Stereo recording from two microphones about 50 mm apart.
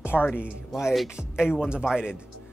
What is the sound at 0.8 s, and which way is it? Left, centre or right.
Speech, centre.